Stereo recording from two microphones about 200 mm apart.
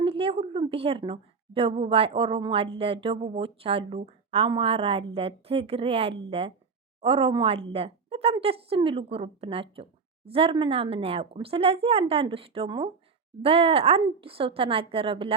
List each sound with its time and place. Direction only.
0.0 s a woman's voice: 30° right (ahead or behind)